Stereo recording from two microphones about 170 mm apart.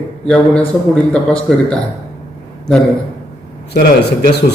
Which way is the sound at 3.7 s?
70° left (ahead or behind).